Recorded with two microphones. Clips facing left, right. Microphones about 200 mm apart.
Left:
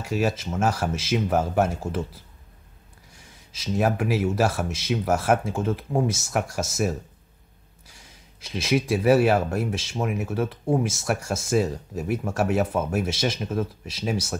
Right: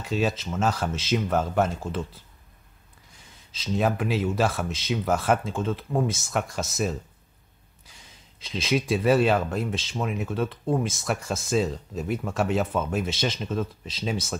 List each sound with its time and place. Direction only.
0.0 s speech: 10° left (ahead or behind)
3.5 s speech: 10° left (ahead or behind)
8.5 s speech: 10° left (ahead or behind)